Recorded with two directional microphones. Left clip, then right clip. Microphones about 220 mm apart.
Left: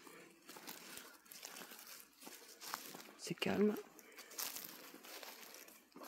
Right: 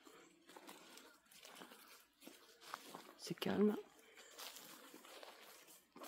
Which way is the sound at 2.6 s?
50° left (ahead or behind).